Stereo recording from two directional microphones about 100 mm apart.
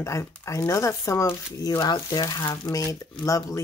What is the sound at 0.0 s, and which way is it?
Speech, 30° left (ahead or behind).